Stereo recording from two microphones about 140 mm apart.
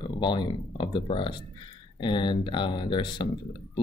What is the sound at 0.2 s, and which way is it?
Speech, 35° left (ahead or behind).